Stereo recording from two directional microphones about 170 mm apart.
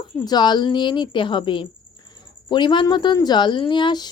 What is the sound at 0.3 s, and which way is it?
Speech, 25° left (ahead or behind).